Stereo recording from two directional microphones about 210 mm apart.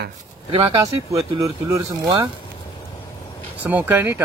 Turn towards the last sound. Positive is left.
turn(degrees=-10)  # may be behind; listen again after turning